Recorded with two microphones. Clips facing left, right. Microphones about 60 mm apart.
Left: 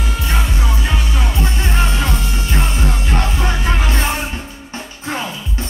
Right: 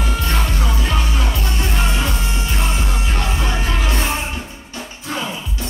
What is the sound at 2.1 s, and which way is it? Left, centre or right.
Music, right.